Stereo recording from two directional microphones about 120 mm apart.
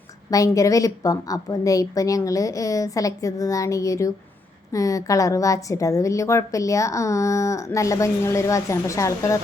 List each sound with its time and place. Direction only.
0.3 s a woman's voice: 30° left (ahead or behind)